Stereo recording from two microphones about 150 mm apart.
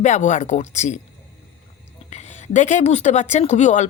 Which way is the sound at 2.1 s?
50° left (ahead or behind).